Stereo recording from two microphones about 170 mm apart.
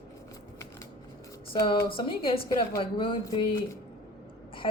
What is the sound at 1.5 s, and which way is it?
A woman's voice, 30° left (ahead or behind).